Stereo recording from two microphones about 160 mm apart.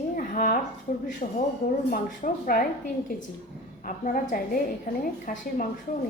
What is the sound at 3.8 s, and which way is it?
A woman's voice, 55° left (ahead or behind).